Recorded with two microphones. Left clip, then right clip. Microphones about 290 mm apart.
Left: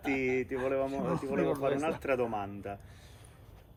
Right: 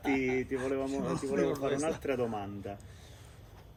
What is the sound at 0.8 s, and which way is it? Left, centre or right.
Speech, left.